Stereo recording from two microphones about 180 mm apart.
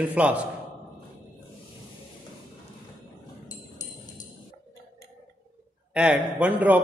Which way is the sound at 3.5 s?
20° left (ahead or behind).